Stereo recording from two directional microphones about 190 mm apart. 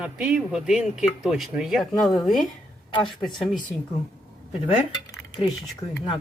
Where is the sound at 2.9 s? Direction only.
25° left (ahead or behind).